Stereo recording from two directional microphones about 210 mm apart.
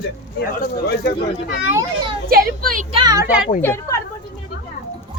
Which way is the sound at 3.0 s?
15° right (ahead or behind).